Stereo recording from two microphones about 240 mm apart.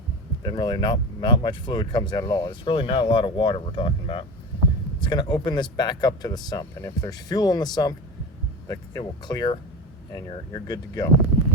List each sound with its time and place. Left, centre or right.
0.4 s speech: centre